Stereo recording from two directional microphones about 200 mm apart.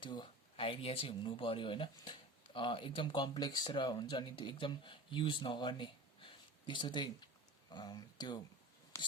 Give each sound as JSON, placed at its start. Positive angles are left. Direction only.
{"t": 0.0, "sound": "speech", "side_deg": 25}
{"t": 8.9, "sound": "whispering", "side_deg": 15}